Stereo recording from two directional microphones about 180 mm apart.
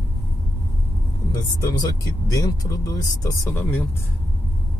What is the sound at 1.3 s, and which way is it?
Speech, 20° left (ahead or behind).